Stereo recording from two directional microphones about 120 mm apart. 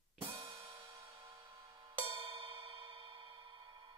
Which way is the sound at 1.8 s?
50° right (ahead or behind).